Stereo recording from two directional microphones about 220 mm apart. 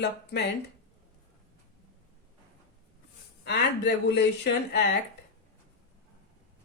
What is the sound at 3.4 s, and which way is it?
Speech, 50° left (ahead or behind).